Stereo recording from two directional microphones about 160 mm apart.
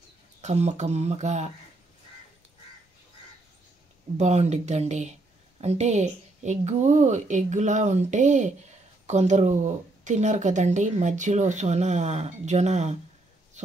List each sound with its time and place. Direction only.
0.4 s speech: 45° right (ahead or behind)
4.2 s speech: 45° right (ahead or behind)